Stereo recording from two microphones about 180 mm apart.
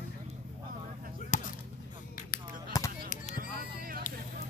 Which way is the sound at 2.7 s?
20° left (ahead or behind).